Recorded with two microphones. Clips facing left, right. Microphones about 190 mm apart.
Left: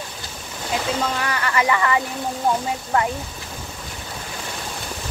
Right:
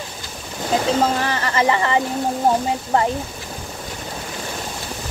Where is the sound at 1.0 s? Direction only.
35° right (ahead or behind).